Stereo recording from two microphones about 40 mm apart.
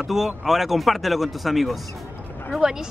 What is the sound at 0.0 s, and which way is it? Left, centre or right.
Speech, centre.